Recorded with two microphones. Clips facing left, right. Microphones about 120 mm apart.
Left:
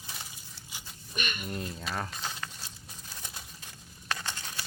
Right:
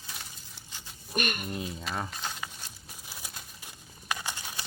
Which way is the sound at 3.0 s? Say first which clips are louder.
Right 1 dB; 10° right (ahead or behind).